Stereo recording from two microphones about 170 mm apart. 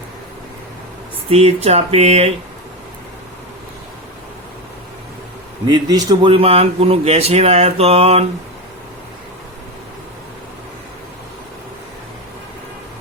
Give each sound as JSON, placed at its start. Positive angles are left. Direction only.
{"t": 1.3, "sound": "speech", "side_deg": -35}
{"t": 5.6, "sound": "speech", "side_deg": -25}